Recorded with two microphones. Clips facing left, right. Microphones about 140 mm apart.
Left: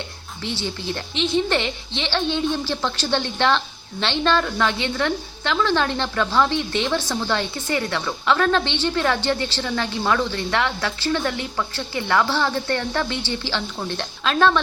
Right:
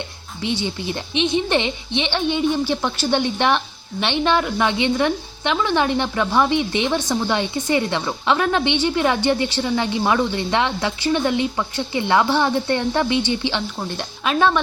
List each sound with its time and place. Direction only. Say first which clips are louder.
0.4 s a woman's voice: right 4 dB; 15° right (ahead or behind)